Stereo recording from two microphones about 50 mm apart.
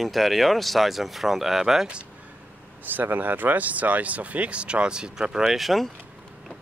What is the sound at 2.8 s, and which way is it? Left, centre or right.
Speech, right.